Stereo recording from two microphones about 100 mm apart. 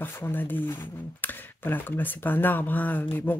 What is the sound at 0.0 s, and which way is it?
Speech, 20° left (ahead or behind).